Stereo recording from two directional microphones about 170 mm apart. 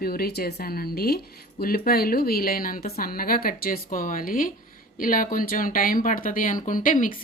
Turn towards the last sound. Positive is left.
turn(degrees=50)  # may be behind; listen again after turning